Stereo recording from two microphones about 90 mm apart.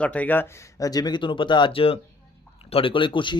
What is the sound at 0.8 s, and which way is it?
Speech, 45° left (ahead or behind).